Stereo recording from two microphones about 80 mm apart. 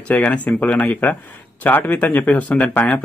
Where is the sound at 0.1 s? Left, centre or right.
Centre.